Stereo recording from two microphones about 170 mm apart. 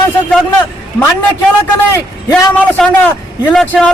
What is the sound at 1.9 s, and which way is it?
Speech, 15° left (ahead or behind).